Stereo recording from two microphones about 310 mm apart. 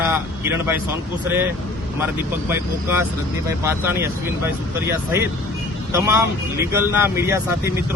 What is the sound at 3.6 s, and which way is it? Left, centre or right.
Speech, centre.